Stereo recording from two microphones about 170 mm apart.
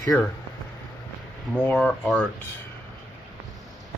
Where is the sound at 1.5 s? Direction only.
10° left (ahead or behind).